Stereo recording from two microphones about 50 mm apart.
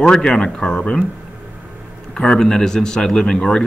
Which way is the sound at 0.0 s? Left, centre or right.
Centre.